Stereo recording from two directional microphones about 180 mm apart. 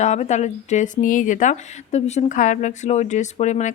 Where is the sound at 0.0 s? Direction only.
40° left (ahead or behind).